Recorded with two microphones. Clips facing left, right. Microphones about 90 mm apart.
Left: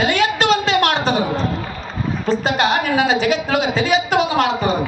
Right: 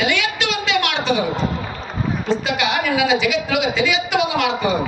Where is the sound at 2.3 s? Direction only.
40° left (ahead or behind).